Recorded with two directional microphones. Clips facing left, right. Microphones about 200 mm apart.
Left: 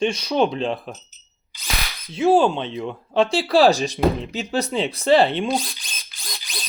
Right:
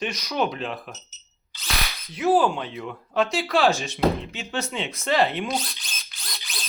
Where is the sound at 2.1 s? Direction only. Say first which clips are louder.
Left 4 dB; 25° left (ahead or behind).